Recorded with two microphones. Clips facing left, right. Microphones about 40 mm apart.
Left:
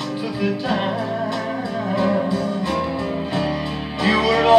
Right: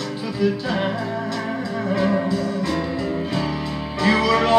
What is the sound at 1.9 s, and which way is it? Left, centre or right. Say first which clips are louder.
Music: left 1 dB; centre.